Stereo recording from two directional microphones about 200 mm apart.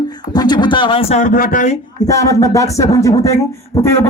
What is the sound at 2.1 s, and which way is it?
A man's voice, 15° left (ahead or behind).